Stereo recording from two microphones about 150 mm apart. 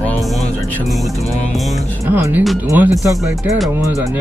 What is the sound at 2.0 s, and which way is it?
Speech, 15° right (ahead or behind).